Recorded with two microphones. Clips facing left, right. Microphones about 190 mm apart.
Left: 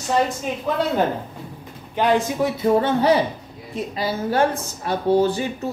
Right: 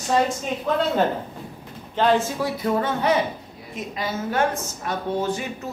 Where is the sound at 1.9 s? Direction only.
15° left (ahead or behind).